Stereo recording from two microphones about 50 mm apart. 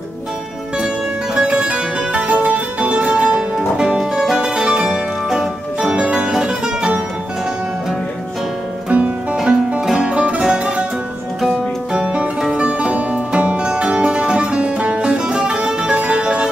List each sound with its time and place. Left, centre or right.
1.3 s music: centre
8.9 s music: right
9.4 s music: centre